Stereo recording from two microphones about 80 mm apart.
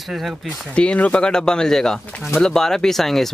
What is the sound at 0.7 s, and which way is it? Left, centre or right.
Speech, centre.